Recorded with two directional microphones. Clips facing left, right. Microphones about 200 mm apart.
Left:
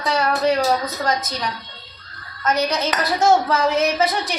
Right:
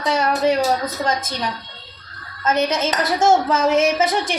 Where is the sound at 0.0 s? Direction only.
20° right (ahead or behind).